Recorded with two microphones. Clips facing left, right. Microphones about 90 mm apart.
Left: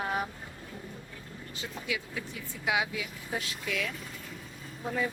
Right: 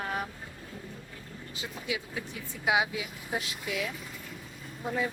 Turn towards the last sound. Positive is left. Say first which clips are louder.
# right 1 dB
turn(degrees=-10)  # may be behind; listen again after turning